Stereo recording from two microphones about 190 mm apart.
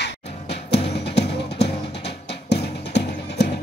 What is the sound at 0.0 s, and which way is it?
Music, 60° left (ahead or behind).